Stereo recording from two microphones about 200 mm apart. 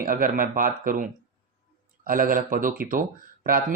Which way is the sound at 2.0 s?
45° right (ahead or behind).